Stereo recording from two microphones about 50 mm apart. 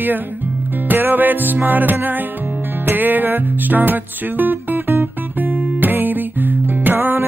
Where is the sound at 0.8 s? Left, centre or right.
Right.